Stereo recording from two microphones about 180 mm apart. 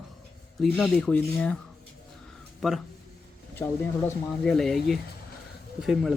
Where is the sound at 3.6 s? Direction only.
10° left (ahead or behind).